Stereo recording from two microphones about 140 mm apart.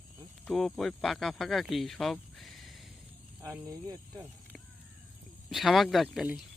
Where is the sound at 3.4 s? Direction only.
25° right (ahead or behind).